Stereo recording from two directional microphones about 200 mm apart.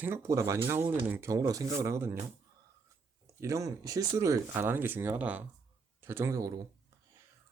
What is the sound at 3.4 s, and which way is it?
Speech, 15° right (ahead or behind).